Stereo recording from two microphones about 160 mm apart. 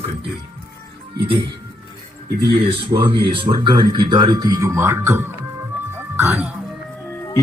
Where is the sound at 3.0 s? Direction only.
35° right (ahead or behind); by 6.5 s 10° right (ahead or behind).